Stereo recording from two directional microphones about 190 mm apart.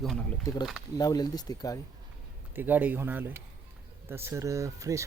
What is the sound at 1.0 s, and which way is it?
Speech, 20° left (ahead or behind).